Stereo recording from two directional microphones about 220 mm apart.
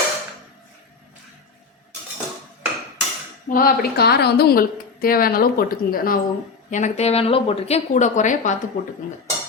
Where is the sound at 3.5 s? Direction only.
40° left (ahead or behind).